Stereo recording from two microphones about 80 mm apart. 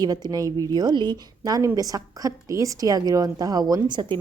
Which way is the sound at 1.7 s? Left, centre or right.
Right.